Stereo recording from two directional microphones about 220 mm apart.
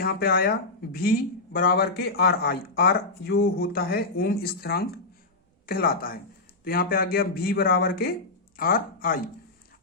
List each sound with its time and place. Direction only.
0.0 s speech: 45° left (ahead or behind)
1.5 s speech: 40° left (ahead or behind)